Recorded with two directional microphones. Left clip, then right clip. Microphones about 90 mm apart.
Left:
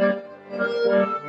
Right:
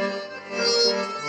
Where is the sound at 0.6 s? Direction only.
30° left (ahead or behind).